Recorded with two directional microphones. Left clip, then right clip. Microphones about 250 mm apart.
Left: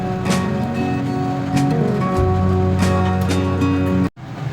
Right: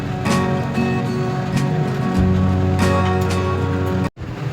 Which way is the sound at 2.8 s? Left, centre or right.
Centre.